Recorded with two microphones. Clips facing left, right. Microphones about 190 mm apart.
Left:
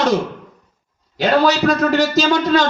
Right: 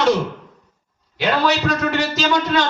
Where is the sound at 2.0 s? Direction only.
40° left (ahead or behind).